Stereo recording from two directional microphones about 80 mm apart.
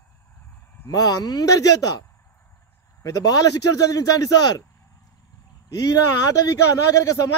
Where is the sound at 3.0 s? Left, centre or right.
Left.